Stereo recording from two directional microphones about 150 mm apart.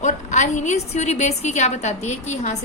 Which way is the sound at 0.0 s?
55° left (ahead or behind).